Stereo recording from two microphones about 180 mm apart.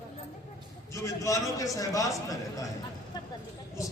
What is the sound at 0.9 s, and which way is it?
A man's voice, 15° left (ahead or behind).